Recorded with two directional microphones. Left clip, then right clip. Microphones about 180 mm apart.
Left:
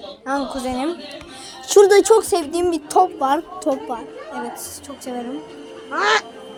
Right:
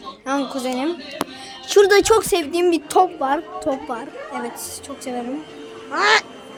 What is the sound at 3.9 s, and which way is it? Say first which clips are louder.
Speech: right 1 dB; 20° right (ahead or behind).